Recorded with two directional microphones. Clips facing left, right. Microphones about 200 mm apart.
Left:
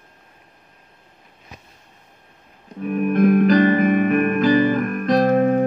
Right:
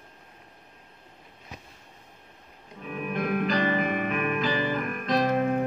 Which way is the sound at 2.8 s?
50° left (ahead or behind).